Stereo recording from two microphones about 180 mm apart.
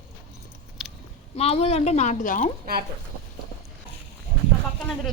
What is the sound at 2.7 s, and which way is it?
Speech, 55° right (ahead or behind).